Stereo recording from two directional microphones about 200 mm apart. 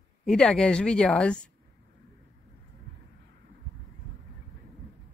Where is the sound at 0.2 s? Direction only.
Centre (ahead or behind).